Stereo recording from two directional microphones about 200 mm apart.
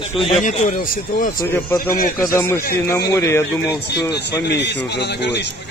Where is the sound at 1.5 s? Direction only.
10° left (ahead or behind).